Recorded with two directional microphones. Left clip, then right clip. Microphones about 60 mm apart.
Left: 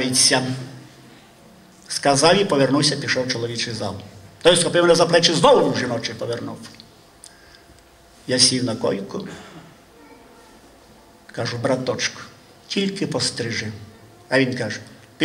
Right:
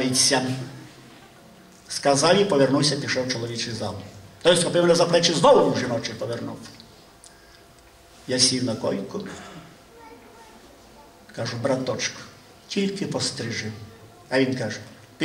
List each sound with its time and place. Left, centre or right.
0.0 s a man's voice: left
1.9 s a man's voice: left
8.3 s a man's voice: left
11.3 s a man's voice: left